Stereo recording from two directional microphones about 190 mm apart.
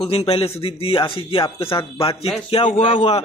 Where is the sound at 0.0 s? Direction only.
30° left (ahead or behind).